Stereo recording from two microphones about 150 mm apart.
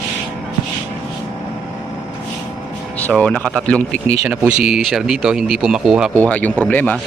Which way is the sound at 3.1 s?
10° left (ahead or behind).